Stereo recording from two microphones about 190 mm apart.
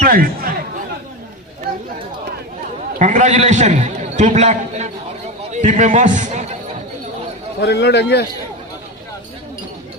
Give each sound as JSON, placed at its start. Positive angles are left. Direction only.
{"t": 0.0, "sound": "speech", "side_deg": -50}
{"t": 3.0, "sound": "a man's voice", "side_deg": -40}
{"t": 7.6, "sound": "a man's voice", "side_deg": 60}